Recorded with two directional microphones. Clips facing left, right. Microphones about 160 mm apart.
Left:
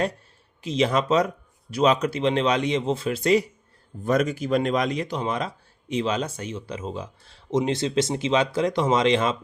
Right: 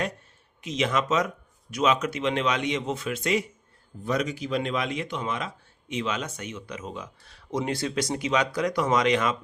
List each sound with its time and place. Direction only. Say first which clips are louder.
0.6 s speech: left 4 dB; 30° left (ahead or behind)
4.0 s speech: left 5 dB; 50° left (ahead or behind); by 9.4 s 25° left (ahead or behind)